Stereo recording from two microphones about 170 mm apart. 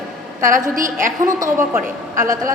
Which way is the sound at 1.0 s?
50° right (ahead or behind).